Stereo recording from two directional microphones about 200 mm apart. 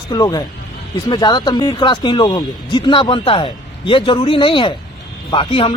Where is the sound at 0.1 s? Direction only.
20° left (ahead or behind).